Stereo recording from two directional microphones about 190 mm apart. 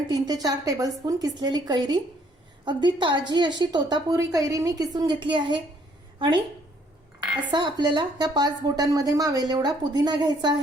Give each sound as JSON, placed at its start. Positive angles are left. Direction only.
{"t": 0.1, "sound": "a woman's voice", "side_deg": -20}
{"t": 7.5, "sound": "a woman's voice", "side_deg": -25}